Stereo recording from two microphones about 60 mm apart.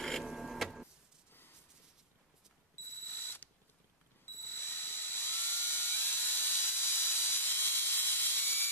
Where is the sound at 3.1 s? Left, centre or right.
Left.